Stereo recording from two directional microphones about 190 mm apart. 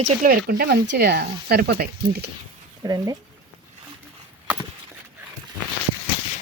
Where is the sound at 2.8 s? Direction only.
20° right (ahead or behind).